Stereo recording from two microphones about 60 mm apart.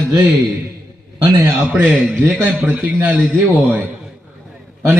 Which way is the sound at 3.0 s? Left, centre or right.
Right.